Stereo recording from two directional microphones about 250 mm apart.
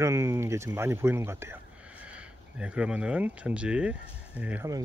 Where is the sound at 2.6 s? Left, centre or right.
Centre.